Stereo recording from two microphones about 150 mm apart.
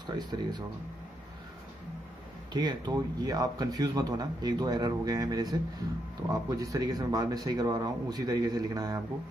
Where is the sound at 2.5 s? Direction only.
30° right (ahead or behind).